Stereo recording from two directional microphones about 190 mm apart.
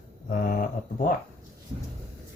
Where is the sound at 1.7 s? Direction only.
30° right (ahead or behind).